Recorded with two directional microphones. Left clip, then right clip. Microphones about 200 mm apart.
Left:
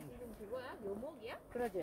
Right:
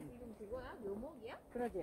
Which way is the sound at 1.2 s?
40° left (ahead or behind).